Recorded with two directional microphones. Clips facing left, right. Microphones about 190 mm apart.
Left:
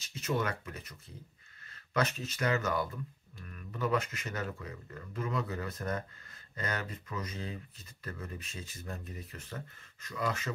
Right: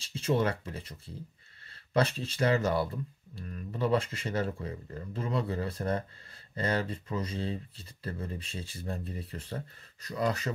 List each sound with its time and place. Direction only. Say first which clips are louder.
0.0 s speech: right 5 dB; 30° right (ahead or behind)